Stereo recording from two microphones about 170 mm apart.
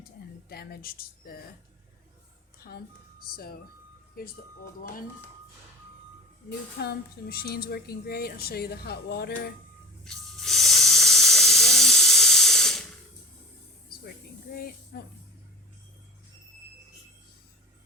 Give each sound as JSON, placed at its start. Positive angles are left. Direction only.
{"t": 0.0, "sound": "a sound", "side_deg": 65}
{"t": 2.6, "sound": "speech", "side_deg": 65}
{"t": 6.7, "sound": "a woman's voice", "side_deg": 70}
{"t": 10.0, "sound": "hiss", "side_deg": 0}
{"t": 14.9, "sound": "a woman's voice", "side_deg": 70}